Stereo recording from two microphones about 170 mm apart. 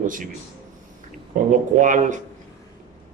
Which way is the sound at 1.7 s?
50° right (ahead or behind).